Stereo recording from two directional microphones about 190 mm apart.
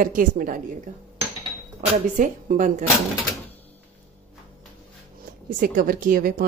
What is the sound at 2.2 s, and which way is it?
Speech, 45° right (ahead or behind).